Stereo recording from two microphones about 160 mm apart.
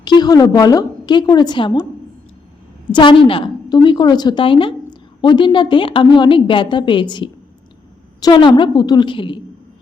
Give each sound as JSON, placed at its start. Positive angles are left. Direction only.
{"t": 0.0, "sound": "a woman's voice", "side_deg": 25}
{"t": 2.9, "sound": "a woman's voice", "side_deg": 30}